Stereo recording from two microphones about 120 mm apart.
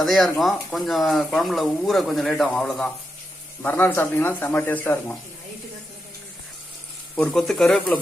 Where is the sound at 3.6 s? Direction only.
15° left (ahead or behind).